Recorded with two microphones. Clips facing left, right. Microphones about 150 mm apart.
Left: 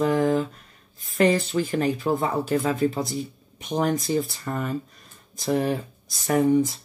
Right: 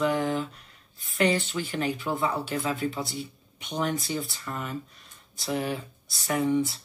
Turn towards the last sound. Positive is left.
turn(degrees=45)  # may be behind; listen again after turning